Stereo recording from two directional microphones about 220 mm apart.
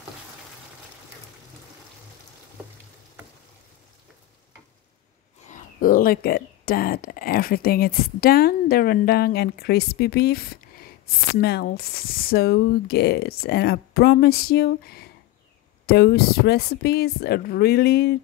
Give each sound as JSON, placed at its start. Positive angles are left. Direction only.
{"t": 5.8, "sound": "speech", "side_deg": 40}